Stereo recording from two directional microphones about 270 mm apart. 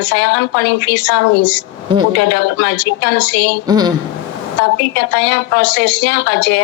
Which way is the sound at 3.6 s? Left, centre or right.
Centre.